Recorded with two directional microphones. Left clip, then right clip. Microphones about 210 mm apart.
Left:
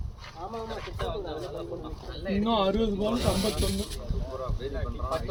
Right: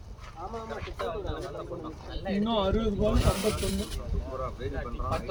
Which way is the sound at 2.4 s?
50° left (ahead or behind).